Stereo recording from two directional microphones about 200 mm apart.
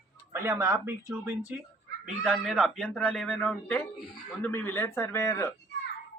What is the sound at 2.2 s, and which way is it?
Speech, centre (ahead or behind).